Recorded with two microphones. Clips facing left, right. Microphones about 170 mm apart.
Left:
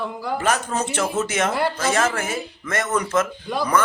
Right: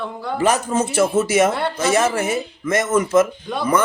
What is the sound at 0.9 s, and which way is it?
Speech, 10° right (ahead or behind).